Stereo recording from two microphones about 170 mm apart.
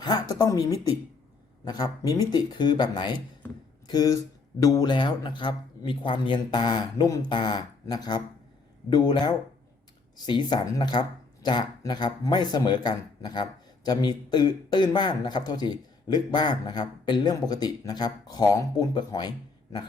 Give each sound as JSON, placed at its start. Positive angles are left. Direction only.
{"t": 0.0, "sound": "speech", "side_deg": 25}